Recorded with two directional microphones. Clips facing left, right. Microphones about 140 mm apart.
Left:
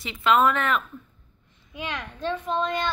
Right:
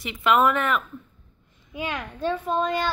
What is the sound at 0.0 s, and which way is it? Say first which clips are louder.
Speech: even; 15° right (ahead or behind).